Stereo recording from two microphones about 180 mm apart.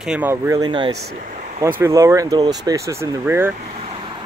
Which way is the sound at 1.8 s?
15° right (ahead or behind).